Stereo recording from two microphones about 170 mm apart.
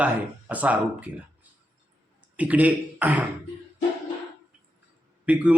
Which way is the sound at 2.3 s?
10° right (ahead or behind).